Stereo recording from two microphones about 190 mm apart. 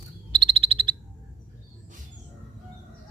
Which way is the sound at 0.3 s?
25° right (ahead or behind).